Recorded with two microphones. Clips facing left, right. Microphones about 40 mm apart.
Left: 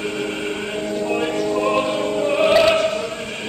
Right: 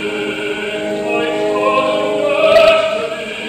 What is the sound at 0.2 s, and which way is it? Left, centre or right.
Music, right.